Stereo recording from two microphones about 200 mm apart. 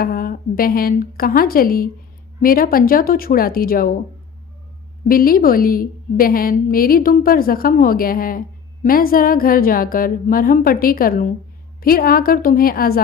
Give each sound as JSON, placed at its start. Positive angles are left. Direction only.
{"t": 0.0, "sound": "a woman's voice", "side_deg": 45}
{"t": 5.0, "sound": "a woman's voice", "side_deg": 45}